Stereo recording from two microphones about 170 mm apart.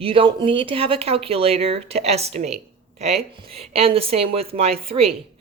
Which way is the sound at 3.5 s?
35° right (ahead or behind).